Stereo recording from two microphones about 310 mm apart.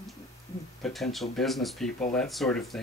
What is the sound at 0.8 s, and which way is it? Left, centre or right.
Speech, centre.